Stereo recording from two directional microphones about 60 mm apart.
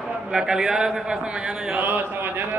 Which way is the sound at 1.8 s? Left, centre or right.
Right.